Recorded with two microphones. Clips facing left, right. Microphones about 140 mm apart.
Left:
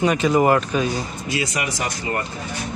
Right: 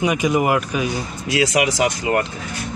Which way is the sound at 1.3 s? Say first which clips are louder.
Right 8 dB; 90° right.